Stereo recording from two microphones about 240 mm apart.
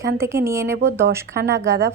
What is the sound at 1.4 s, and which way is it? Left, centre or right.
Speech, right.